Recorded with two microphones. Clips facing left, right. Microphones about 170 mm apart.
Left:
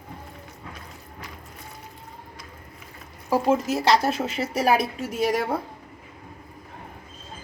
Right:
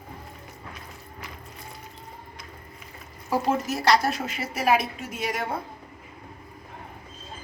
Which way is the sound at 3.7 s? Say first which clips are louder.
Left 2 dB; 25° left (ahead or behind).